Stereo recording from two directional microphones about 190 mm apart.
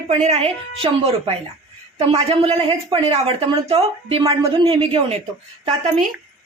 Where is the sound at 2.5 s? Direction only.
20° right (ahead or behind).